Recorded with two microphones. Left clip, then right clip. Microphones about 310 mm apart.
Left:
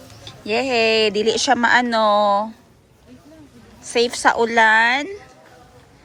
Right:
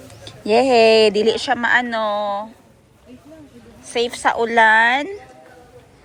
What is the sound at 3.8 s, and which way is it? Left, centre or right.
Speech, centre.